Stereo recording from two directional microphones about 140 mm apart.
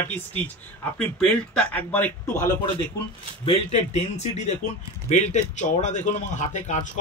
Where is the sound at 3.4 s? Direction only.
50° left (ahead or behind).